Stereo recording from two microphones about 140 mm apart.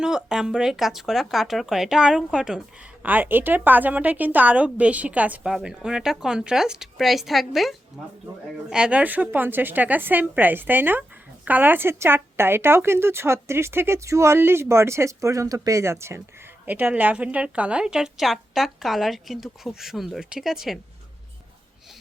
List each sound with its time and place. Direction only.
0.0 s a woman's voice: 5° right (ahead or behind)